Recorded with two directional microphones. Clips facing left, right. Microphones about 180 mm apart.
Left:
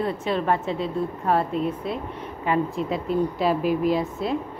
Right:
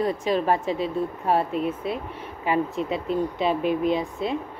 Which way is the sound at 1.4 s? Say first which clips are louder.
Even; 5° right (ahead or behind).